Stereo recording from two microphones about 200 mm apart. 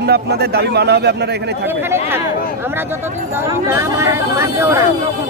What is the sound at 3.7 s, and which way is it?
Speech, 10° right (ahead or behind).